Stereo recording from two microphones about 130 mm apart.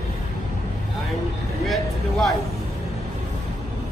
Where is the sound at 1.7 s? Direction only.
Centre (ahead or behind).